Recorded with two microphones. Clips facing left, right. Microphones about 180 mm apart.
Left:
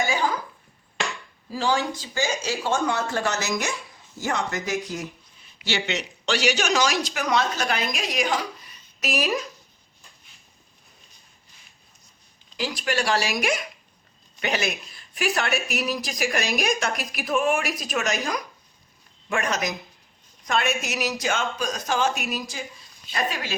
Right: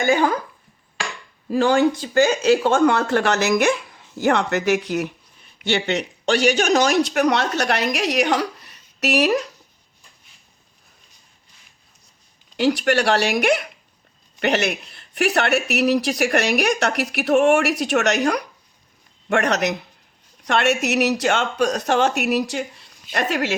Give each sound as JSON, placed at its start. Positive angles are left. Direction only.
{"t": 0.0, "sound": "speech", "side_deg": -60}
{"t": 1.5, "sound": "speech", "side_deg": -60}
{"t": 12.5, "sound": "a woman's voice", "side_deg": -65}